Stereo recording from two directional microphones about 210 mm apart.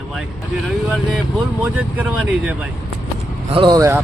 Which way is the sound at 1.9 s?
5° right (ahead or behind).